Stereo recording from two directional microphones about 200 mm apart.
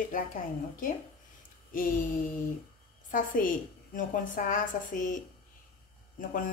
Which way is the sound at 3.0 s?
40° left (ahead or behind).